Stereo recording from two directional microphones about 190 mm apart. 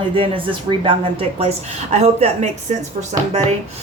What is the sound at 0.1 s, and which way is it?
A woman's voice, 30° right (ahead or behind).